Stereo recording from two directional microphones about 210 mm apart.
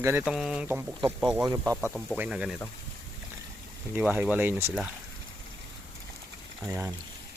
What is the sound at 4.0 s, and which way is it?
Speech, 5° right (ahead or behind).